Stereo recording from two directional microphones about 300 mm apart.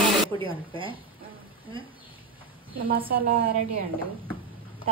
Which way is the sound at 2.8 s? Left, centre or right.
Right.